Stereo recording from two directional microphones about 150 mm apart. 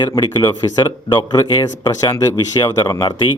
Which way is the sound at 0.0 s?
30° left (ahead or behind).